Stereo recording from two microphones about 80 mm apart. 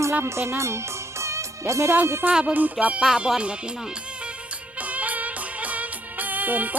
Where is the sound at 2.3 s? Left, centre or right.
Centre.